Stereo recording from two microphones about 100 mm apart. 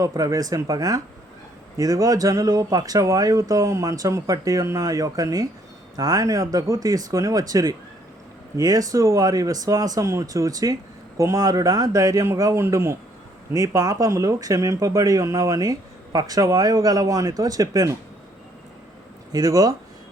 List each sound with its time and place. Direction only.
0.0 s speech: 35° right (ahead or behind)
19.3 s speech: 40° right (ahead or behind)